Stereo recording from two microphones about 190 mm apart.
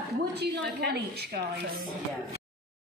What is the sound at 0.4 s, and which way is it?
Speech, 60° right (ahead or behind).